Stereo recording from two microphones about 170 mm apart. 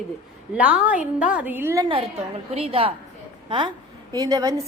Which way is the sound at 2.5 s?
35° right (ahead or behind).